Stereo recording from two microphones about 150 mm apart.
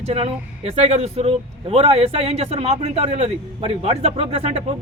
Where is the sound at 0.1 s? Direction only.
40° right (ahead or behind).